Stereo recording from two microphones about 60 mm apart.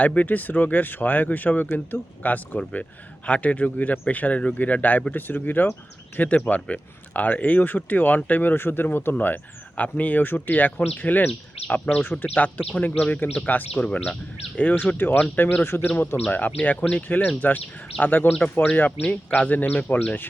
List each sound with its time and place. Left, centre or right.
0.0 s speech: left
15.4 s speech: left
15.6 s speech: left
16.3 s speech: left